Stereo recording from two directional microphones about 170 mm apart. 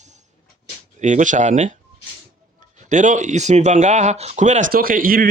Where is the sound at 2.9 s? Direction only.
45° right (ahead or behind).